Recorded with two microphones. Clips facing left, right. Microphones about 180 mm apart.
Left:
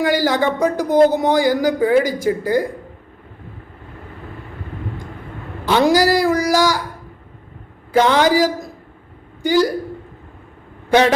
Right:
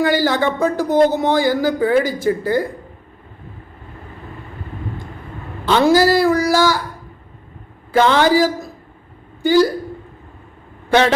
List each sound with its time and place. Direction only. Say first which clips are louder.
0.0 s speech: even; 10° left (ahead or behind)
5.6 s speech: right 1 dB; 15° left (ahead or behind)
7.9 s speech: even; 15° left (ahead or behind)
10.8 s a man's voice: left 1 dB; 15° left (ahead or behind)